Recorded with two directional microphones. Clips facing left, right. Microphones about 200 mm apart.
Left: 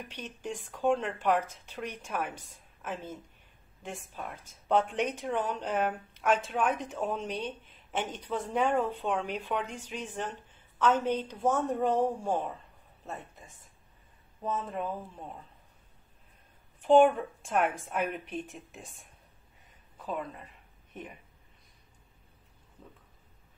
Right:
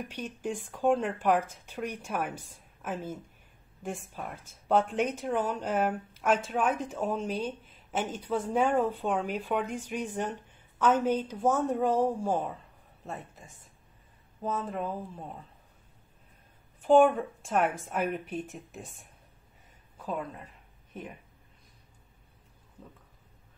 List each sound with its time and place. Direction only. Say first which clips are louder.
0.1 s speech: right 4 dB; 10° right (ahead or behind)
14.4 s speech: right 1 dB; centre (ahead or behind)
16.8 s speech: even; centre (ahead or behind)
20.0 s speech: right 1 dB; centre (ahead or behind)